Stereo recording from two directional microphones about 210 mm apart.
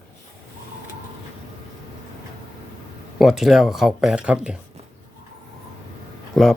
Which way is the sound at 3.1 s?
Centre (ahead or behind).